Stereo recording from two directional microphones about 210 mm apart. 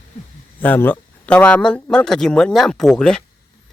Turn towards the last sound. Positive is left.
turn(degrees=5)  # may be behind; listen again after turning